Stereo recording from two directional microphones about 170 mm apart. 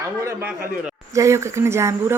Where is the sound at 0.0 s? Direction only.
15° right (ahead or behind).